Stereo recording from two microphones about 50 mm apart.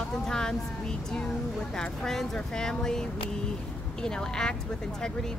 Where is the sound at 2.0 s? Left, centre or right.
Centre.